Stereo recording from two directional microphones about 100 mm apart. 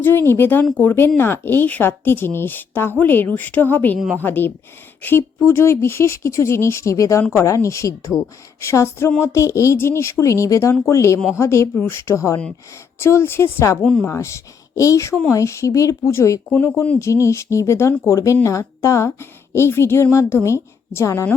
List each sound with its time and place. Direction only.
0.0 s a woman's voice: 20° left (ahead or behind)
13.8 s speech: 10° left (ahead or behind)
14.1 s a woman's voice: 30° left (ahead or behind)